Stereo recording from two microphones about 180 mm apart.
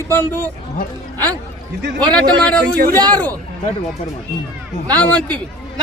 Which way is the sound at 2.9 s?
20° right (ahead or behind).